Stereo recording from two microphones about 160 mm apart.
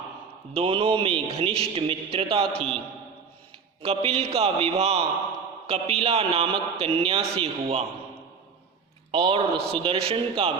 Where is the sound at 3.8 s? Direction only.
40° right (ahead or behind).